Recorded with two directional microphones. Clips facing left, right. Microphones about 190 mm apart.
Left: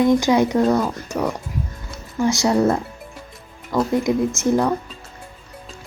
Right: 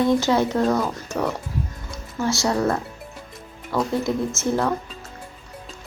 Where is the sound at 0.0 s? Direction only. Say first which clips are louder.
Left 3 dB; 15° left (ahead or behind).